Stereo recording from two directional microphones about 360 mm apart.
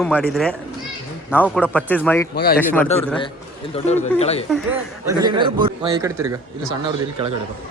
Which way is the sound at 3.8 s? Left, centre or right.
Centre.